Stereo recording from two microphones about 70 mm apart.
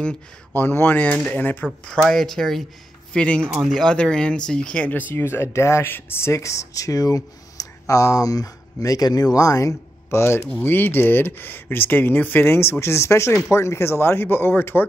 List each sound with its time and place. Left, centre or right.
0.6 s speech: left
1.9 s speech: centre
5.1 s speech: left
10.6 s speech: left